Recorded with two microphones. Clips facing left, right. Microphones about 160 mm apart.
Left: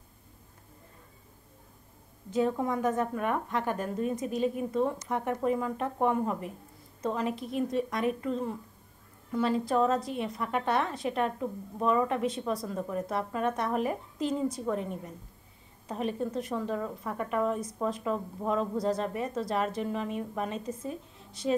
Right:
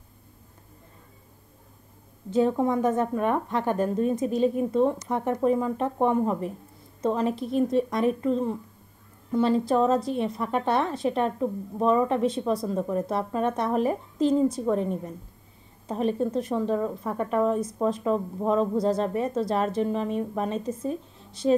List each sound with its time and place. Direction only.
2.3 s a woman's voice: 30° right (ahead or behind)